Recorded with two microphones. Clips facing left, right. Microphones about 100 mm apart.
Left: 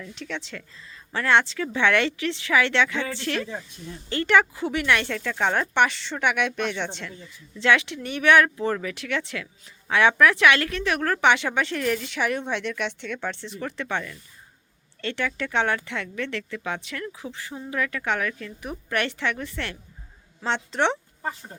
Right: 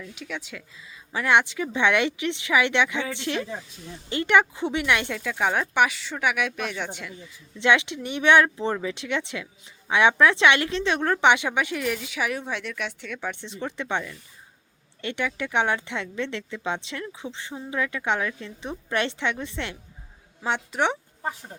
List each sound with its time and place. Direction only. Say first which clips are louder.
0.0 s speech: left 1 dB; 5° right (ahead or behind)
7.6 s speech: even; 20° right (ahead or behind)
13.4 s speech: even; 20° right (ahead or behind)